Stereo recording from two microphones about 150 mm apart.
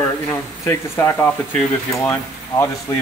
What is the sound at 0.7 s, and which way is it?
Speech, 15° left (ahead or behind).